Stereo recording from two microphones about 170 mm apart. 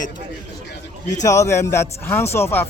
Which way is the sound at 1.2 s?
20° left (ahead or behind).